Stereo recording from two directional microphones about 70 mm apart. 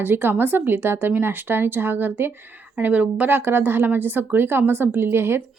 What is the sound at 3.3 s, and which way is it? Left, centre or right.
Speech, right.